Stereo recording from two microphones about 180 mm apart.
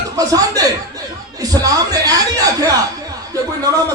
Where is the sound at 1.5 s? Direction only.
20° right (ahead or behind).